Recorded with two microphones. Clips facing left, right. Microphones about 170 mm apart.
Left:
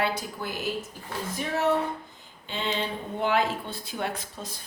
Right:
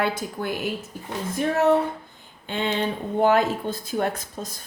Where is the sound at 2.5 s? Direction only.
55° right (ahead or behind).